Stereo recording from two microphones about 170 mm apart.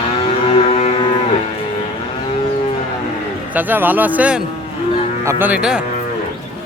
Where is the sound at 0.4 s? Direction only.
35° left (ahead or behind).